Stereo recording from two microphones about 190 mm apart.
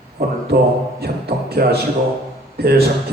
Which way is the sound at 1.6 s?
50° right (ahead or behind).